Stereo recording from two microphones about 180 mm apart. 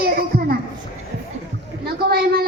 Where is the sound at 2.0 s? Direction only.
60° right (ahead or behind).